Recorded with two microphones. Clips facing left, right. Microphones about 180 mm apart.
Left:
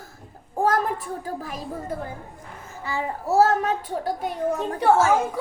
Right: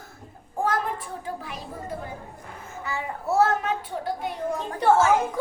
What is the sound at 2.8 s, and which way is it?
A child's voice, 30° left (ahead or behind).